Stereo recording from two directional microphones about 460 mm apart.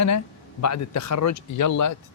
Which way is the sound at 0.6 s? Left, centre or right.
Left.